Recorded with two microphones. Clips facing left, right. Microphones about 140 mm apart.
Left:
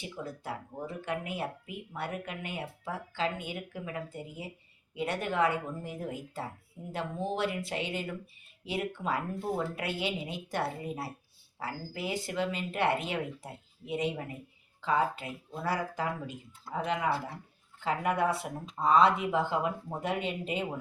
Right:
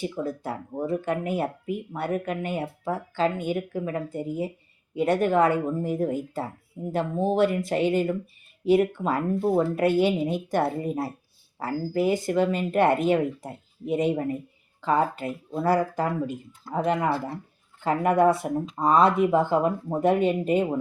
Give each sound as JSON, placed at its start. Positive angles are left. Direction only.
{"t": 0.0, "sound": "speech", "side_deg": -45}